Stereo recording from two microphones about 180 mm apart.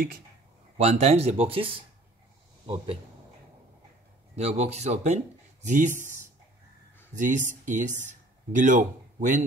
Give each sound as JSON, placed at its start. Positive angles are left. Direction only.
{"t": 0.7, "sound": "speech", "side_deg": -40}
{"t": 4.4, "sound": "speech", "side_deg": -35}
{"t": 7.2, "sound": "speech", "side_deg": -45}